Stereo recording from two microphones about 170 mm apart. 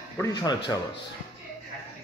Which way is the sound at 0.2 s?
25° left (ahead or behind).